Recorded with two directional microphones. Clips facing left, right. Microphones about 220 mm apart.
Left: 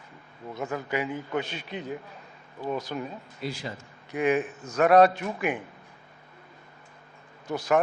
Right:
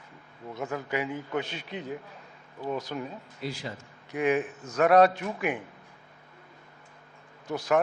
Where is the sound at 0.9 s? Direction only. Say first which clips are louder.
Left 1 dB; 15° left (ahead or behind).